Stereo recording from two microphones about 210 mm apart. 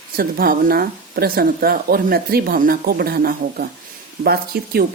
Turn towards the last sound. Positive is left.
turn(degrees=-45)  # may be behind; listen again after turning